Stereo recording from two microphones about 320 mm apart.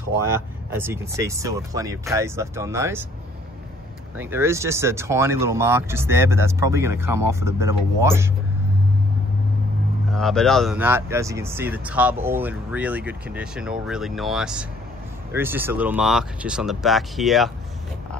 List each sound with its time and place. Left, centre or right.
0.2 s speech: centre
4.2 s speech: centre
10.1 s speech: centre